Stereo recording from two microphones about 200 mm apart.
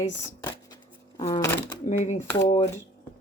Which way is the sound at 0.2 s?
20° left (ahead or behind).